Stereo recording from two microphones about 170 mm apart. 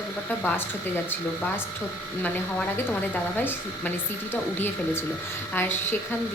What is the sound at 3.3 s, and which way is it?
Speech, 10° left (ahead or behind).